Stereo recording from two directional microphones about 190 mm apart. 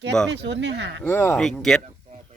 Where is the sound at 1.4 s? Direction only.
Centre (ahead or behind).